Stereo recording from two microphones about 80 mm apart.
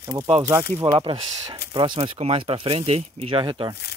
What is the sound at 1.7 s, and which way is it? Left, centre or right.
Speech, right.